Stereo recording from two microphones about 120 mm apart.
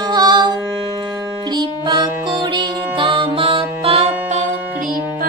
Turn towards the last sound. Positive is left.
turn(degrees=-55)  # may be behind; listen again after turning